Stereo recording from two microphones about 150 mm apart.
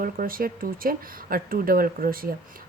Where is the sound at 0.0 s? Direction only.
75° right (ahead or behind).